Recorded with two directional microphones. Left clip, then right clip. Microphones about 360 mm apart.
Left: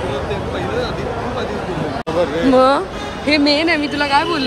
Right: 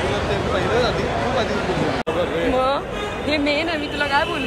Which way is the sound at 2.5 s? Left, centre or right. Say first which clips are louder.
Left 7 dB; left.